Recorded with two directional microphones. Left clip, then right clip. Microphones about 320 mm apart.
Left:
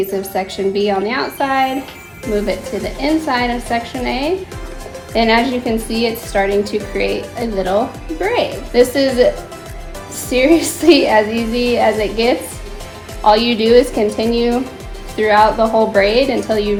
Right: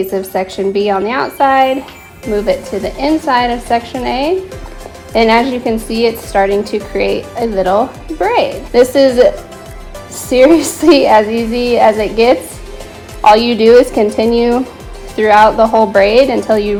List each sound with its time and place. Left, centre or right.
0.2 s a woman's voice: right
15.5 s speech: right
15.9 s a woman's voice: right